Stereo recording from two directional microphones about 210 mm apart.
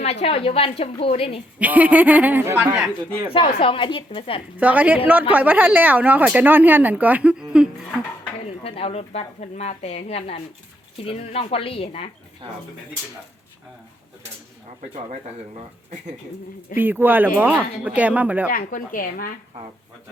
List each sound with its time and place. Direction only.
0.0 s a woman's voice: 30° left (ahead or behind)
1.5 s speech: 5° right (ahead or behind)
3.3 s a woman's voice: 25° left (ahead or behind)
4.5 s speech: 5° right (ahead or behind)
8.6 s a woman's voice: 30° left (ahead or behind)
12.4 s speech: 25° right (ahead or behind)
14.8 s speech: 35° right (ahead or behind)
16.7 s speech: 10° right (ahead or behind)
18.5 s speech: 40° left (ahead or behind)